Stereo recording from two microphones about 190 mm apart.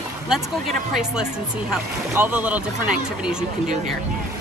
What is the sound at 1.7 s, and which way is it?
Speech, 10° right (ahead or behind).